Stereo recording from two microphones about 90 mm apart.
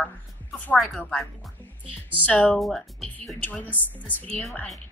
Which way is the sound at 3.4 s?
20° left (ahead or behind).